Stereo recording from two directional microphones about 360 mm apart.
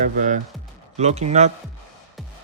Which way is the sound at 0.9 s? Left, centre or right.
Centre.